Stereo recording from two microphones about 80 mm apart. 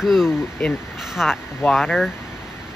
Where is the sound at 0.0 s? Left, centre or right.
Centre.